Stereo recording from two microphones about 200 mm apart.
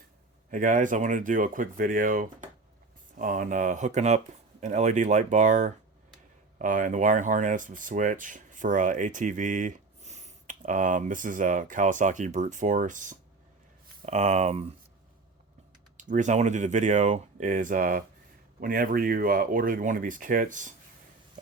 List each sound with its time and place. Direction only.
0.5 s speech: 40° right (ahead or behind)
16.0 s speech: 40° right (ahead or behind)